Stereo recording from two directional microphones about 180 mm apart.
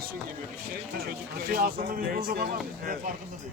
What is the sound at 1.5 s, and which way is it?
Speech, 55° right (ahead or behind).